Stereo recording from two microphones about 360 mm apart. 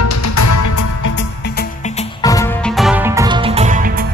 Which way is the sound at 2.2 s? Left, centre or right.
Centre.